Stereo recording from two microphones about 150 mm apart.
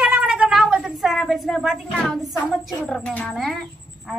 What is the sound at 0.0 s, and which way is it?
Cat, 5° right (ahead or behind).